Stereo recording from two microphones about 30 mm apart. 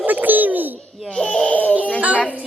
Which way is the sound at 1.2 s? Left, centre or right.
Left.